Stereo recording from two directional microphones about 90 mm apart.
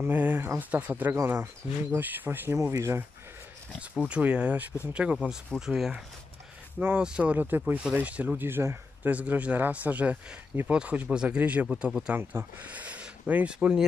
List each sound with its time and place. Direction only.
0.0 s speech: 20° right (ahead or behind)
1.1 s speech: 30° right (ahead or behind)
4.1 s speech: 15° right (ahead or behind)
12.2 s speech: 25° right (ahead or behind)
12.6 s speech: 15° right (ahead or behind)